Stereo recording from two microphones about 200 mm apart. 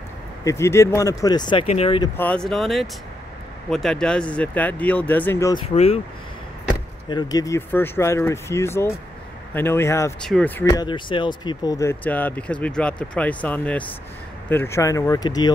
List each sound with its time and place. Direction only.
0.4 s speech: 15° left (ahead or behind)
2.1 s speech: 5° left (ahead or behind)
7.1 s speech: 20° left (ahead or behind)